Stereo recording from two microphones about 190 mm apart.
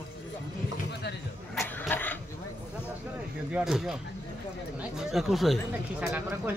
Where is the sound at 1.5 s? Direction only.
5° left (ahead or behind).